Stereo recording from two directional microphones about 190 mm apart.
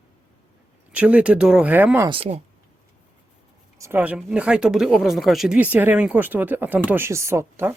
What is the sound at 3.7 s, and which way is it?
Speech, 15° right (ahead or behind).